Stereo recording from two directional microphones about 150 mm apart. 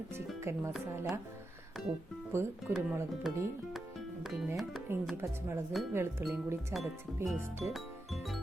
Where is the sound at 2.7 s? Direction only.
15° right (ahead or behind).